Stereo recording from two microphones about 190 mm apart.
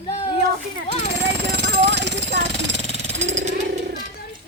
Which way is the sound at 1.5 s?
65° right (ahead or behind).